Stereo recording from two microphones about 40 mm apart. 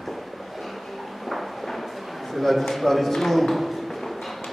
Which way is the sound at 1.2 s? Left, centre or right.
Centre.